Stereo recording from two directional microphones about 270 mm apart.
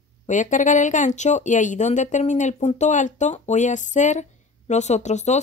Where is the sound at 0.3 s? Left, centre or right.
Left.